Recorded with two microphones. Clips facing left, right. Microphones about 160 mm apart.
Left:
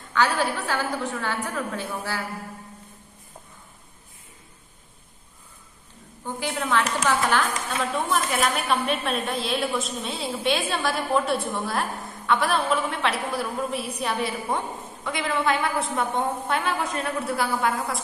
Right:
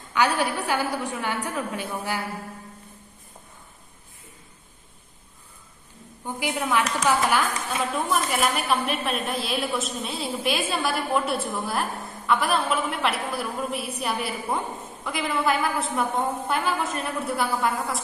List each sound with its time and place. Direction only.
0.1 s a woman's voice: 15° right (ahead or behind)
6.2 s a woman's voice: 15° right (ahead or behind)
7.9 s a woman's voice: centre (ahead or behind)